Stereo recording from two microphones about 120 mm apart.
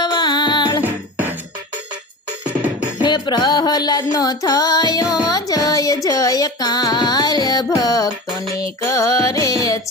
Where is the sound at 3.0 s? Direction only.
40° left (ahead or behind).